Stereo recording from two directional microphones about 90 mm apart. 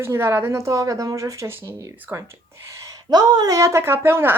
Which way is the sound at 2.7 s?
45° right (ahead or behind).